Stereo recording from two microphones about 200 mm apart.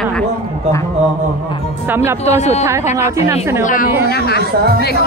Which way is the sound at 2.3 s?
35° left (ahead or behind).